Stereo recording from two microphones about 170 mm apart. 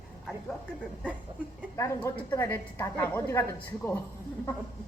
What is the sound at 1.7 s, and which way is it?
A woman's voice, 15° left (ahead or behind).